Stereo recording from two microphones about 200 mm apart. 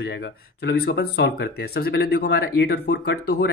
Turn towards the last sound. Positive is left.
turn(degrees=55)  # may be behind; listen again after turning